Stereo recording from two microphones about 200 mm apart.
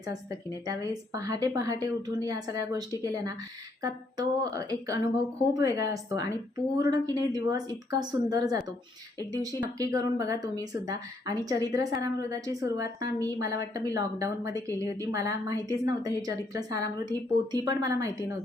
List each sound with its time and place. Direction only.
0.0 s a woman's voice: 15° right (ahead or behind)